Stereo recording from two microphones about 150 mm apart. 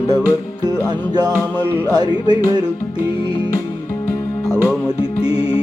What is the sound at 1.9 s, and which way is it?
Music, 30° right (ahead or behind).